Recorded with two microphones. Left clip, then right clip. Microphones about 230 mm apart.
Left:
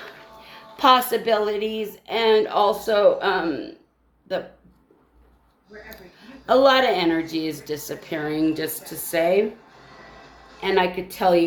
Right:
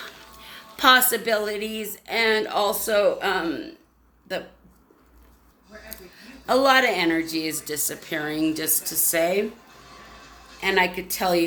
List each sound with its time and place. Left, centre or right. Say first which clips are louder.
0.4 s a woman's voice: left 1 dB; right
5.9 s a woman's voice: even; centre
10.6 s a woman's voice: left 1 dB; centre